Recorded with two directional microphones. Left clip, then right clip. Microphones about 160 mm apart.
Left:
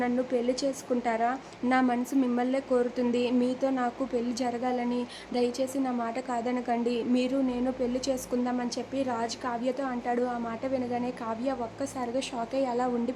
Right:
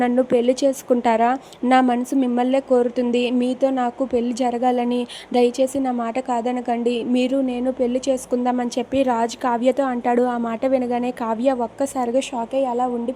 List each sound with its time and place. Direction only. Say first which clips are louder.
0.0 s a woman's voice: right 10 dB; 45° right (ahead or behind)
12.5 s speech: right 8 dB; 25° right (ahead or behind)